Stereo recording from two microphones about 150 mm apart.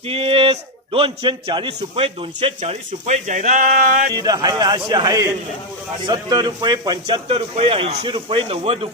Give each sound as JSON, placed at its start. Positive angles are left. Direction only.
{"t": 0.1, "sound": "a man's voice", "side_deg": -40}
{"t": 4.1, "sound": "a man's voice", "side_deg": -25}